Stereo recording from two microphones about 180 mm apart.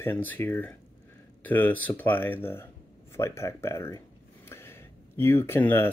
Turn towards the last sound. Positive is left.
turn(degrees=10)  # may be behind; listen again after turning